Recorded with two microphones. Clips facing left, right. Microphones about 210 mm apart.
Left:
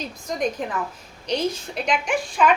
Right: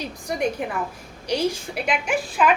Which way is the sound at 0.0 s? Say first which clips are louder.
Right 1 dB; 10° right (ahead or behind).